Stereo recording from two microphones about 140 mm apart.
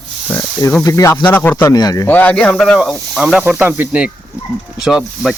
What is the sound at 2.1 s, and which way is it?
Speech, 10° left (ahead or behind).